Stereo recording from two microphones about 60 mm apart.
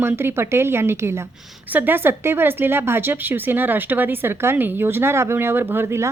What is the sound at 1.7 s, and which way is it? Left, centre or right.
A woman's voice, right.